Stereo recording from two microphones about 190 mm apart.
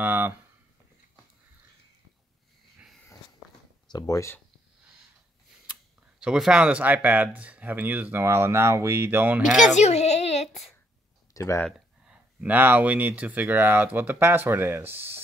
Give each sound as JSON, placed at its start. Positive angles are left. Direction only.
{"t": 0.0, "sound": "a sound", "side_deg": -10}
{"t": 3.9, "sound": "speech", "side_deg": 15}
{"t": 5.7, "sound": "speech", "side_deg": -5}
{"t": 9.6, "sound": "a sound", "side_deg": 35}
{"t": 11.3, "sound": "speech", "side_deg": 15}
{"t": 12.1, "sound": "speech", "side_deg": -5}